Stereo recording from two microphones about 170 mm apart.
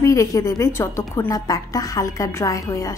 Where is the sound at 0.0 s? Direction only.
20° left (ahead or behind).